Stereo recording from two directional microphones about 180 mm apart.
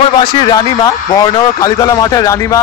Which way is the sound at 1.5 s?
20° left (ahead or behind).